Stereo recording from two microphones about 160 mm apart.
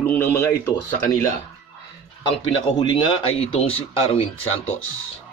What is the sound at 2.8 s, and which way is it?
Speech, 30° left (ahead or behind).